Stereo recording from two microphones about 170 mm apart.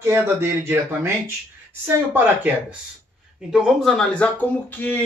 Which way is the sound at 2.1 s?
10° right (ahead or behind).